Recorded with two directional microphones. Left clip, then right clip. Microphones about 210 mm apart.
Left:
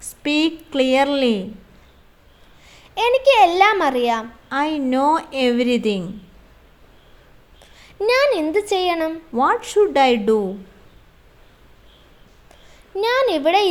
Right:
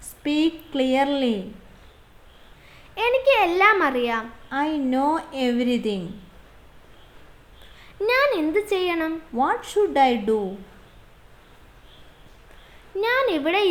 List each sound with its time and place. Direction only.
0.0 s a woman's voice: 30° left (ahead or behind)
2.6 s a child's voice: 15° left (ahead or behind)
4.4 s a woman's voice: 30° left (ahead or behind)
7.8 s a child's voice: 15° left (ahead or behind)
9.3 s a woman's voice: 30° left (ahead or behind)
13.0 s a child's voice: 15° left (ahead or behind)